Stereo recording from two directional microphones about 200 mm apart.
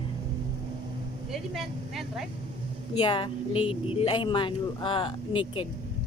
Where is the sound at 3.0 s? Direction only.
25° left (ahead or behind).